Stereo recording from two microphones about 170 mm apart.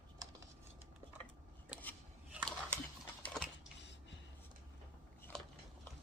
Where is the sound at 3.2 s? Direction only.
5° left (ahead or behind).